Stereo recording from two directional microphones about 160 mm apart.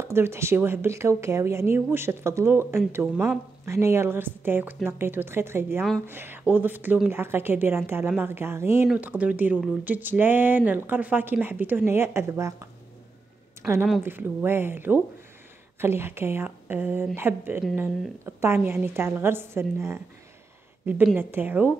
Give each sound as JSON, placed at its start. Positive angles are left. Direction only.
{"t": 0.0, "sound": "speech", "side_deg": -15}
{"t": 13.6, "sound": "a sound", "side_deg": -15}
{"t": 14.0, "sound": "speech", "side_deg": -15}